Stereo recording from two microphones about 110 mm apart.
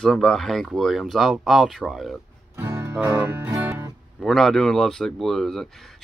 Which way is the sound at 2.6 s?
20° right (ahead or behind).